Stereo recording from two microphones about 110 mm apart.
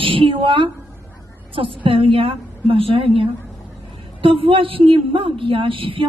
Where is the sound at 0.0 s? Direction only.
50° right (ahead or behind).